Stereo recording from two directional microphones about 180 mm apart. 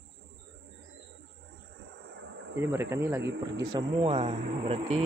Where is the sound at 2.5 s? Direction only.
15° right (ahead or behind).